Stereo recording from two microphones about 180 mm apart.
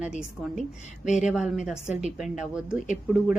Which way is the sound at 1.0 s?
40° left (ahead or behind).